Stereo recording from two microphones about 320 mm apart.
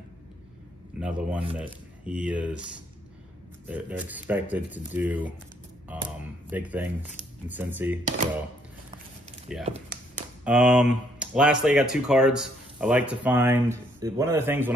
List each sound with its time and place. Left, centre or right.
0.9 s speech: centre
3.6 s speech: centre
9.7 s tap: centre
10.4 s speech: centre